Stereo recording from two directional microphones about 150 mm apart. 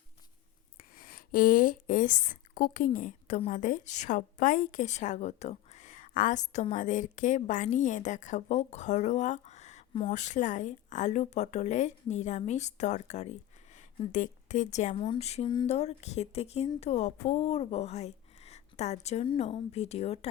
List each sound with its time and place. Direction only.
0.8 s a woman's voice: 75° left (ahead or behind); by 14.9 s 50° left (ahead or behind)
14.9 s a woman's voice: 35° left (ahead or behind)